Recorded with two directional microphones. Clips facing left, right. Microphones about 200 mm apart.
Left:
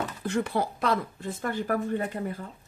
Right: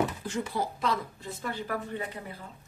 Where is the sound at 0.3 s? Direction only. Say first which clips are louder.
Left 4 dB; 60° left (ahead or behind).